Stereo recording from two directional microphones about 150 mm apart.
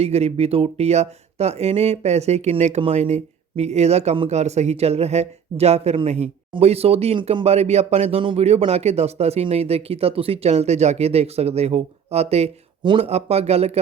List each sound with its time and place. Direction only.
0.0 s speech: 45° right (ahead or behind)
12.8 s speech: 30° right (ahead or behind)
13.1 s speech: 45° right (ahead or behind)